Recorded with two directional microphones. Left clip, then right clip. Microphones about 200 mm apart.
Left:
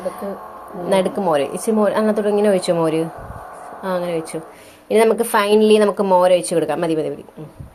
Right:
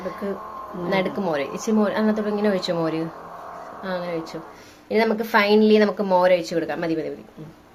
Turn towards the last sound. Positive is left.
turn(degrees=20)  # may be behind; listen again after turning